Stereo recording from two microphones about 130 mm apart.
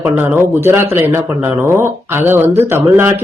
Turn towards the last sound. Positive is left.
turn(degrees=-20)  # may be behind; listen again after turning